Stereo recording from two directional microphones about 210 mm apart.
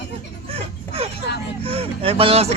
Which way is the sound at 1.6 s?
25° right (ahead or behind).